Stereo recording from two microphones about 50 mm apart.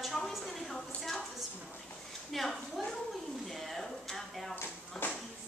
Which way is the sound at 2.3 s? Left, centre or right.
Centre.